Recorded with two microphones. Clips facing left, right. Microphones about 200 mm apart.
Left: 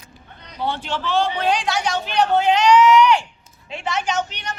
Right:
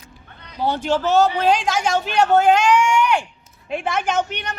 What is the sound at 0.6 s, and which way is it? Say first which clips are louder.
A man's voice: right 5 dB; 40° right (ahead or behind).